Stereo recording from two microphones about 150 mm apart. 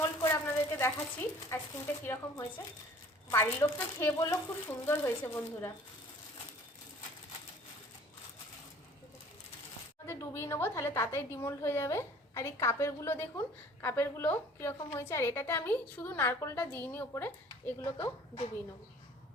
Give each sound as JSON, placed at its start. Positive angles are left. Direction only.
{"t": 0.0, "sound": "a sound", "side_deg": 15}
{"t": 1.5, "sound": "a woman's voice", "side_deg": 15}
{"t": 10.1, "sound": "a woman's voice", "side_deg": 15}
{"t": 17.9, "sound": "a woman's voice", "side_deg": 35}